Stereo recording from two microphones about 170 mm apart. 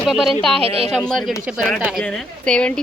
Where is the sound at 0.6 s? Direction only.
35° right (ahead or behind).